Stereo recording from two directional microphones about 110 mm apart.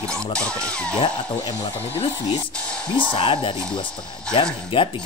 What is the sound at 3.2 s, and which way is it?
Speech, 50° left (ahead or behind).